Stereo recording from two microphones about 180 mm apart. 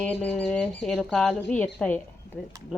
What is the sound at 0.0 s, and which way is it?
Speech, 5° left (ahead or behind).